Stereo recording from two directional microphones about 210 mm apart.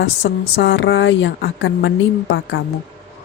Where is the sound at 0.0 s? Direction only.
65° left (ahead or behind).